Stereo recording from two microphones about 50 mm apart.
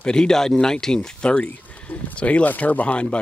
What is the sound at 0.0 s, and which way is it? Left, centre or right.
Speech, centre.